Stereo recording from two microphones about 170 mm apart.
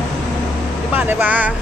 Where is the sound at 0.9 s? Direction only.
10° right (ahead or behind).